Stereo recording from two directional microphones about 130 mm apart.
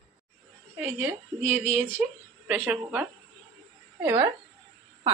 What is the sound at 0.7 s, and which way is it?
A woman's voice, 20° right (ahead or behind).